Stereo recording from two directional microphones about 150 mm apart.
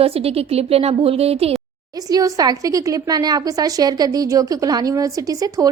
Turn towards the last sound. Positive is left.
turn(degrees=-25)  # may be behind; listen again after turning